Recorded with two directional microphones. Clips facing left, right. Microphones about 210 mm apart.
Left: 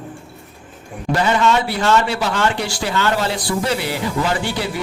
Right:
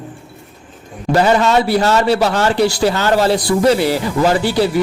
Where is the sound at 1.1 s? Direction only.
40° right (ahead or behind).